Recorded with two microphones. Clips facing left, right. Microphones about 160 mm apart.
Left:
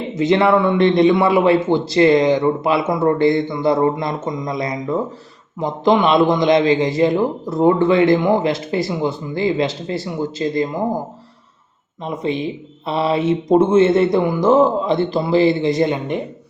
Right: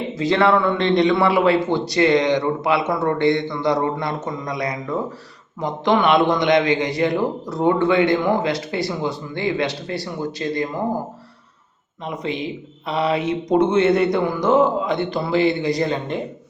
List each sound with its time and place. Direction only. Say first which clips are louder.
0.1 s a man's voice: left 3 dB; 20° left (ahead or behind)
12.0 s a man's voice: left 4 dB; 25° left (ahead or behind)